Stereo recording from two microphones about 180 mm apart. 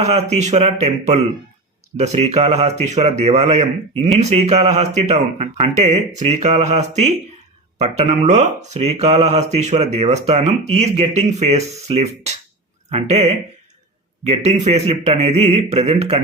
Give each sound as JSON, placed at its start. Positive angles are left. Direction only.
{"t": 0.0, "sound": "speech", "side_deg": -35}
{"t": 14.4, "sound": "speech", "side_deg": -35}